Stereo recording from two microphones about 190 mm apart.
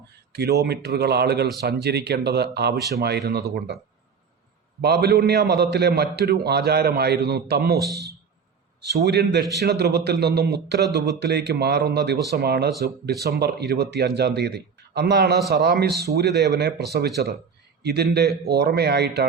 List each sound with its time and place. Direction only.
0.3 s speech: 60° right (ahead or behind)
4.8 s speech: 60° right (ahead or behind)
8.8 s speech: 60° right (ahead or behind)